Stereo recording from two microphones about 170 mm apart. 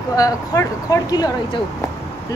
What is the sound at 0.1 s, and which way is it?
Speech, 20° left (ahead or behind).